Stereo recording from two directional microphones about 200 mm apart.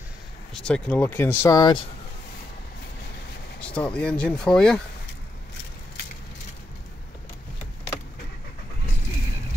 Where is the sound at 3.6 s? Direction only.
5° left (ahead or behind).